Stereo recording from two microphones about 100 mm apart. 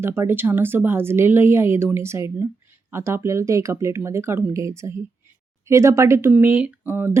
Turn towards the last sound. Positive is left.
turn(degrees=-20)  # may be behind; listen again after turning